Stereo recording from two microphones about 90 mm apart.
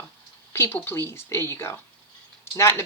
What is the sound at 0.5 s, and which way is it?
Speech, 25° left (ahead or behind).